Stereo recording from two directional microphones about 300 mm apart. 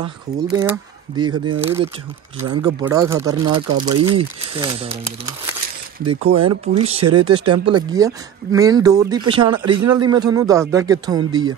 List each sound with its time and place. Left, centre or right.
0.6 s speech: centre
2.5 s speech: centre